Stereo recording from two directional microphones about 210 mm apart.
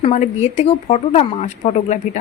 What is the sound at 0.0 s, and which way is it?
A woman's voice, 30° left (ahead or behind).